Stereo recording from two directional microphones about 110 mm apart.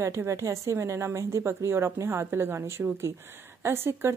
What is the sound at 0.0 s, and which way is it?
Speech, 25° right (ahead or behind).